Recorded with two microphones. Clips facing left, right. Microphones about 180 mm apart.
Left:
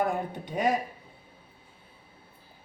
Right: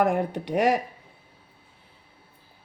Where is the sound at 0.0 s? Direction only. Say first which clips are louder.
Right 6 dB; 75° right (ahead or behind).